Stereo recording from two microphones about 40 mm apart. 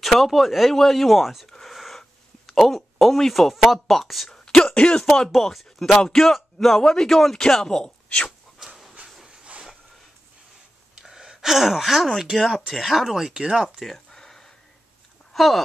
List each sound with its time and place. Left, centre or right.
0.0 s speech: centre
1.5 s a sound: centre
3.8 s speech: centre
4.7 s speech: left
5.3 s speech: centre
6.8 s speech: centre
8.5 s pant: centre
9.4 s a sound: right
11.0 s gasp: centre
12.2 s speech: centre
13.3 s speech: right
13.7 s speech: centre
14.1 s a sound: centre
15.3 s speech: centre